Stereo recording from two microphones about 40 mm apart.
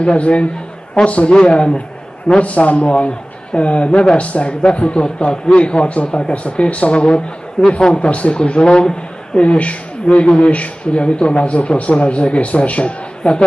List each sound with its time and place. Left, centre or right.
0.0 s speech: left
9.4 s speech: left